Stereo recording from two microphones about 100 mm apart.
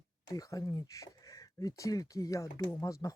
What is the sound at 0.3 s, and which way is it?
Speech, 35° left (ahead or behind).